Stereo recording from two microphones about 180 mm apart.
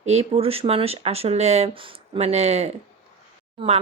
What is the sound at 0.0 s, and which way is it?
Speech, 35° right (ahead or behind).